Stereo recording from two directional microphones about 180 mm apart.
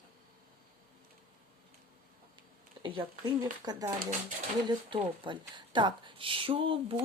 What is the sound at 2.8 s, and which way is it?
Speech, 25° right (ahead or behind).